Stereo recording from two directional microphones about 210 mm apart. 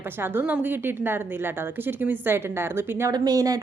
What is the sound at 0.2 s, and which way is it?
A woman's voice, 10° right (ahead or behind).